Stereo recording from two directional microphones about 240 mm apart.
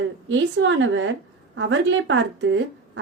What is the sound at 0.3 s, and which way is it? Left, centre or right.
A woman's voice, right.